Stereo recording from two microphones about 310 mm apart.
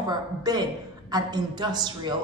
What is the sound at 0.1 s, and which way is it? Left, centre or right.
Speech, centre.